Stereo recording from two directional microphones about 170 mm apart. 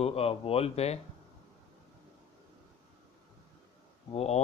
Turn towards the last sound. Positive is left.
turn(degrees=40)  # may be behind; listen again after turning